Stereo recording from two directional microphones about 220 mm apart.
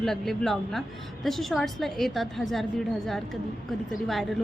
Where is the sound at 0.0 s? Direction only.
Centre (ahead or behind).